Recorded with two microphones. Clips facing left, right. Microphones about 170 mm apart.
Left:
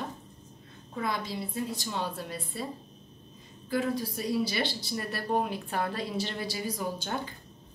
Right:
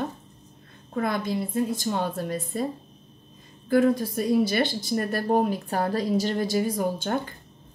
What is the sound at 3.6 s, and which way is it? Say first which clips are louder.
A woman's voice: right 9 dB; 50° right (ahead or behind).